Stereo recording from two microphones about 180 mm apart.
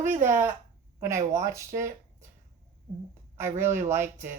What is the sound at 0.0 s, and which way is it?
Speech, 45° right (ahead or behind).